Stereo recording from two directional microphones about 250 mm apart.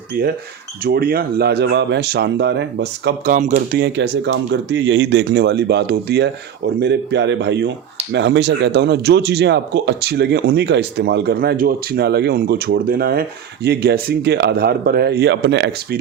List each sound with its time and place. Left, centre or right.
0.1 s speech: right